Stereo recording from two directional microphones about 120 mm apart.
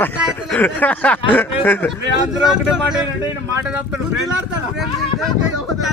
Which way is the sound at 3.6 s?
10° right (ahead or behind).